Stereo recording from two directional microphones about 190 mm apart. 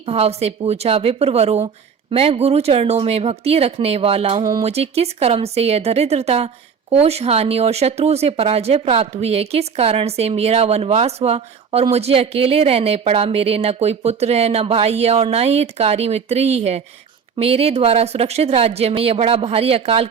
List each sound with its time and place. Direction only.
0.0 s speech: 30° right (ahead or behind)